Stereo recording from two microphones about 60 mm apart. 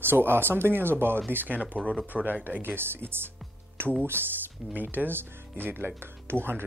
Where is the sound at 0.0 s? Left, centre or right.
Right.